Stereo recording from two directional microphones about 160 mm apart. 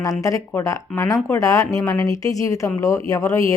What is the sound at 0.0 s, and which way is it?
A woman's voice, 20° left (ahead or behind).